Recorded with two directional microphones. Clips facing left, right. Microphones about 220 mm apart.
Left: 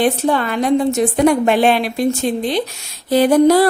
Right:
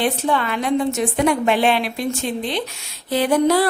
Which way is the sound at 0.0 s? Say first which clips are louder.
Left 4 dB; 40° left (ahead or behind).